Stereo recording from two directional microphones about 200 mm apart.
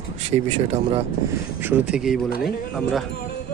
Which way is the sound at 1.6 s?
5° right (ahead or behind).